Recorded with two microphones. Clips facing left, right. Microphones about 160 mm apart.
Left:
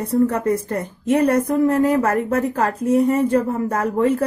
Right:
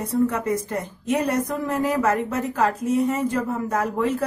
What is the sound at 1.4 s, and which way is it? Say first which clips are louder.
Speech: left 7 dB; 30° left (ahead or behind).